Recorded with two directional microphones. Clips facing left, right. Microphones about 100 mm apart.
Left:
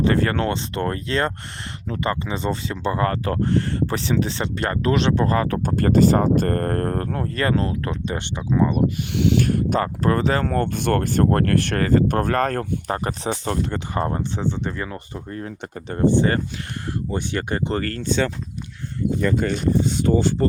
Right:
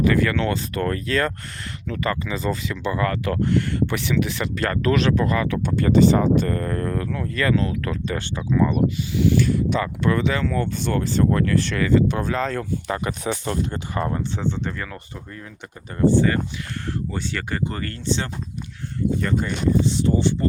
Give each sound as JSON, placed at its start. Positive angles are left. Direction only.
{"t": 0.0, "sound": "speech", "side_deg": 35}
{"t": 0.5, "sound": "speech", "side_deg": 25}
{"t": 7.9, "sound": "speech", "side_deg": 25}
{"t": 9.1, "sound": "speech", "side_deg": 75}
{"t": 13.2, "sound": "speech", "side_deg": 30}
{"t": 14.2, "sound": "speech", "side_deg": 15}
{"t": 14.8, "sound": "speech", "side_deg": 25}
{"t": 17.1, "sound": "speech", "side_deg": 20}
{"t": 17.9, "sound": "speech", "side_deg": 50}
{"t": 19.8, "sound": "speech", "side_deg": 50}